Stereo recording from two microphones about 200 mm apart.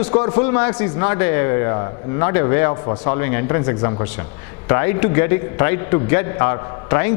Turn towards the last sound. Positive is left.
turn(degrees=15)  # may be behind; listen again after turning